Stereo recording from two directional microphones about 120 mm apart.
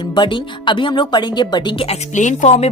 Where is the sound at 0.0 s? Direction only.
40° left (ahead or behind).